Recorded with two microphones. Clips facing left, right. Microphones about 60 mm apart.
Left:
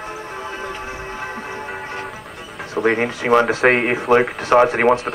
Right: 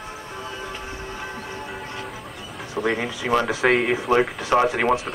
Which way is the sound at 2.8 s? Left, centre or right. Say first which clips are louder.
Left 7 dB; left.